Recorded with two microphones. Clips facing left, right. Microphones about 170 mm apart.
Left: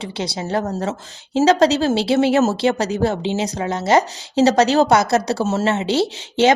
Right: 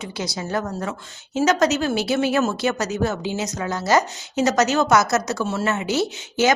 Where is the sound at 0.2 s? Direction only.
25° left (ahead or behind).